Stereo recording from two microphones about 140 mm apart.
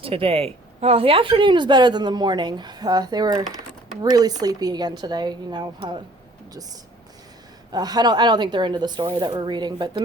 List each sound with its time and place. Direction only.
0.0 s speech: 40° right (ahead or behind)
7.7 s speech: 30° right (ahead or behind)